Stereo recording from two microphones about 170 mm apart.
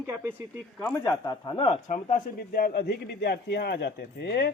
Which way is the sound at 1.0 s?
20° left (ahead or behind).